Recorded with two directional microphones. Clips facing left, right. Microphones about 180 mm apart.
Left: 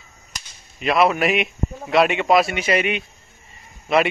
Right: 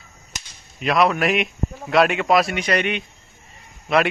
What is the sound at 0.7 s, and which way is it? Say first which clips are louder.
A man's voice: left 1 dB; centre (ahead or behind).